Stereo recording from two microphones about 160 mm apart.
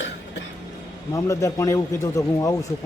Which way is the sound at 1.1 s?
20° left (ahead or behind).